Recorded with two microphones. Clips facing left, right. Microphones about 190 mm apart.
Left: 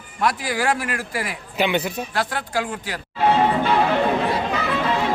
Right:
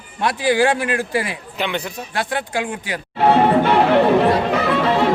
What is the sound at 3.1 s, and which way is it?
Music, 60° right (ahead or behind).